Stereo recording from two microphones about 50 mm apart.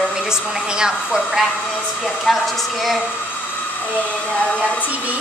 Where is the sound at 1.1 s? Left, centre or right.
Centre.